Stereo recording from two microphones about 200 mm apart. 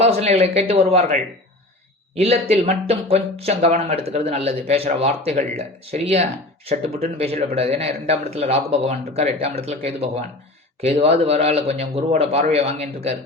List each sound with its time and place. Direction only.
0.0 s speech: 30° right (ahead or behind)
7.5 s speech: 30° right (ahead or behind)